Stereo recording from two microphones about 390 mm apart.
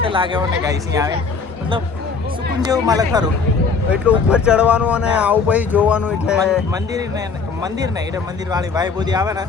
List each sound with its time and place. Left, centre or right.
0.0 s speech: centre
2.6 s speech: centre